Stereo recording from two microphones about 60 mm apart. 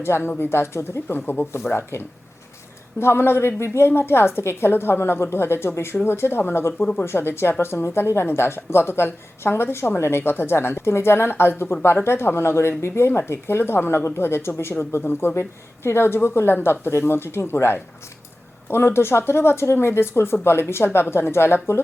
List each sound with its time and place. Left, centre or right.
0.0 s speech: left
1.0 s speech: left
3.0 s speech: left
6.7 s speech: centre
7.0 s speech: left